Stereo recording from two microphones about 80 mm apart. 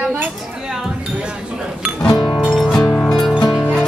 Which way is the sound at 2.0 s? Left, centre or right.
Left.